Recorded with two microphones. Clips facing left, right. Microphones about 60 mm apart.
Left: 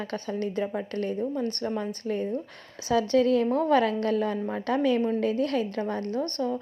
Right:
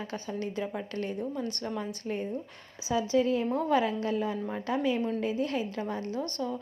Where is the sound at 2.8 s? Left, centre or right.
Left.